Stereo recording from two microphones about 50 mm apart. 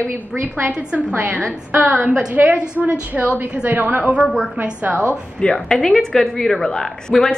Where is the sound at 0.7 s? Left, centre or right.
Right.